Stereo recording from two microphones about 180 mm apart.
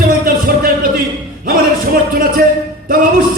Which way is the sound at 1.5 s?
55° right (ahead or behind).